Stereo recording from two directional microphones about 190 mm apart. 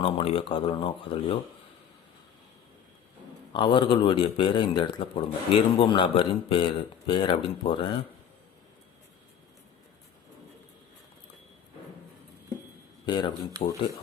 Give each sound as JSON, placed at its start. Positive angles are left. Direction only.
{"t": 0.0, "sound": "a man's voice", "side_deg": 30}
{"t": 3.5, "sound": "a man's voice", "side_deg": 25}
{"t": 13.1, "sound": "speech", "side_deg": 25}
{"t": 13.6, "sound": "speech", "side_deg": 35}